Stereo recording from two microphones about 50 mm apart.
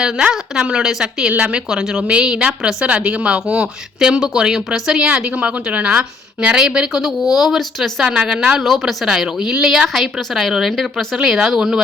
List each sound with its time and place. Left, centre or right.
0.0 s a woman's voice: centre
6.9 s a woman's voice: centre
8.6 s a woman's voice: centre